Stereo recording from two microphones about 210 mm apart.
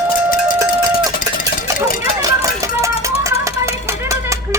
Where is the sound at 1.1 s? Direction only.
40° left (ahead or behind).